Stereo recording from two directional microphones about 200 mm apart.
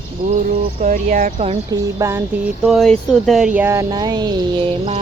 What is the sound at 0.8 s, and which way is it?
Speech, 45° right (ahead or behind).